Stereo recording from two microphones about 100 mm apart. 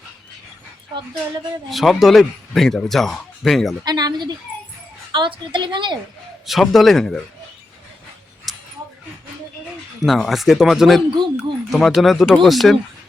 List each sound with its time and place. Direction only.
1.7 s speech: centre (ahead or behind)
3.8 s a woman's voice: 45° right (ahead or behind)
6.4 s speech: centre (ahead or behind)
8.5 s a sound: centre (ahead or behind)
10.0 s speech: centre (ahead or behind)